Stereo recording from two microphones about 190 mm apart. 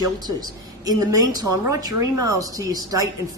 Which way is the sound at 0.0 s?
20° right (ahead or behind).